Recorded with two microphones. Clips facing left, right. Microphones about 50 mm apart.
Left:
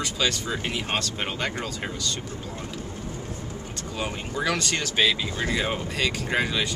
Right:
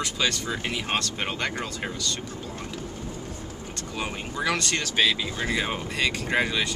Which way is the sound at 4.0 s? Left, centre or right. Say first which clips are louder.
Left 1 dB; centre.